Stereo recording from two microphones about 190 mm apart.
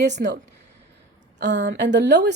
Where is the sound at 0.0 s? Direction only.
65° right (ahead or behind).